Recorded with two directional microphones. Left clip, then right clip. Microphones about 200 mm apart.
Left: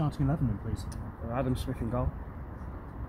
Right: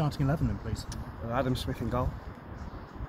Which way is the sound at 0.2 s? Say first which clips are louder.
Even; 35° right (ahead or behind).